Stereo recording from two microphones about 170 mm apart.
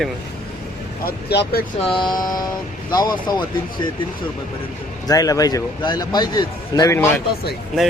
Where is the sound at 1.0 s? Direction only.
70° left (ahead or behind).